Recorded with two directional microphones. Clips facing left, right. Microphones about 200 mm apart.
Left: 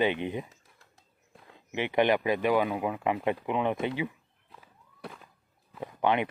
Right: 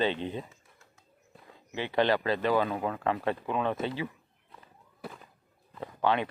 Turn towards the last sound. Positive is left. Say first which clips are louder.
# left 1 dB
turn(degrees=20)  # may be behind; listen again after turning